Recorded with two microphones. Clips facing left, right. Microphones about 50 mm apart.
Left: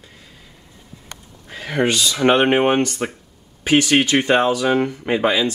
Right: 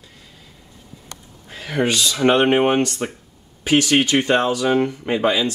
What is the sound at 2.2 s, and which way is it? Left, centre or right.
Speech, centre.